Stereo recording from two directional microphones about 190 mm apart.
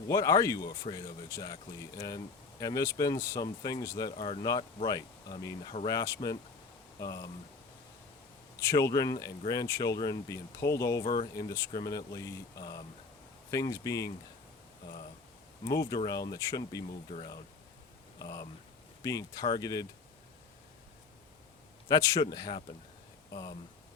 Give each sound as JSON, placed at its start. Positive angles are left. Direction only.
{"t": 0.1, "sound": "speech", "side_deg": 20}
{"t": 8.7, "sound": "speech", "side_deg": 20}
{"t": 15.6, "sound": "speech", "side_deg": 20}
{"t": 17.1, "sound": "speech", "side_deg": 30}
{"t": 18.2, "sound": "speech", "side_deg": 20}
{"t": 21.8, "sound": "speech", "side_deg": 20}